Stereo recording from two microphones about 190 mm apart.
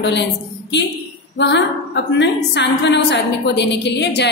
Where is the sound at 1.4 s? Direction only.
65° left (ahead or behind).